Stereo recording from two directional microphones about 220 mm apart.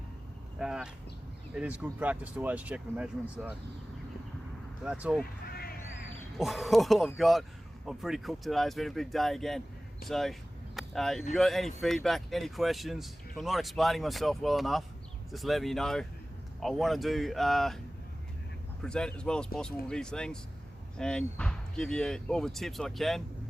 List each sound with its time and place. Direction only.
0.6 s a sound: 5° right (ahead or behind)
1.5 s speech: 5° right (ahead or behind)
4.8 s speech: 5° right (ahead or behind)
5.2 s a sound: 45° left (ahead or behind)
6.1 s speech: centre (ahead or behind)
18.8 s speech: 5° left (ahead or behind)